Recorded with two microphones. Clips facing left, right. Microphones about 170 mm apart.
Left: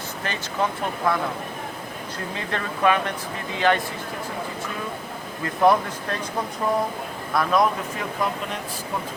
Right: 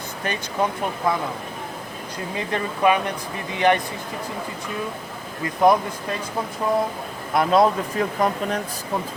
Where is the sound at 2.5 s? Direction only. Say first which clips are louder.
Right 2 dB; 15° right (ahead or behind).